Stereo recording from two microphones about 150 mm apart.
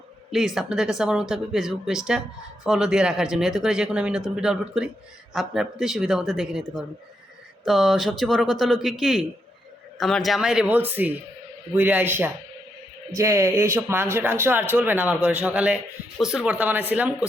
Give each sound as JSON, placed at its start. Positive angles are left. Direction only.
{"t": 0.3, "sound": "speech", "side_deg": -5}
{"t": 7.6, "sound": "a man's voice", "side_deg": 0}